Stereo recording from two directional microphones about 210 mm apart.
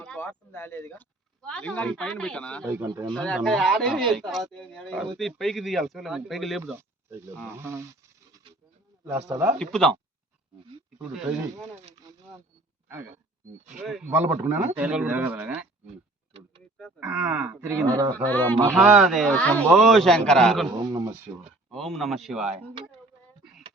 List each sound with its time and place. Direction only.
0.0 s speech: 5° left (ahead or behind)
2.7 s speech: 15° right (ahead or behind)
3.1 s speech: centre (ahead or behind)
6.6 s speech: 10° right (ahead or behind)
9.0 s speech: 10° right (ahead or behind)
9.6 s speech: 5° left (ahead or behind)
12.1 s a sound: 15° right (ahead or behind)
13.8 s speech: 5° right (ahead or behind)
17.0 s speech: 5° right (ahead or behind)
18.1 s speech: 10° left (ahead or behind)
18.6 s speech: centre (ahead or behind)
20.7 s speech: 20° right (ahead or behind)
21.7 s speech: centre (ahead or behind)